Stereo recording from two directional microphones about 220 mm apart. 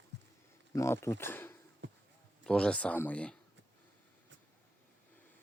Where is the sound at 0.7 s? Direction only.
10° left (ahead or behind).